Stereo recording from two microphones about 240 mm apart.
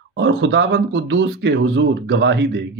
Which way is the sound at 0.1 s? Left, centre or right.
Right.